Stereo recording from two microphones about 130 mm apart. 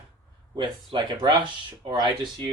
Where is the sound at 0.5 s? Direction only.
35° right (ahead or behind).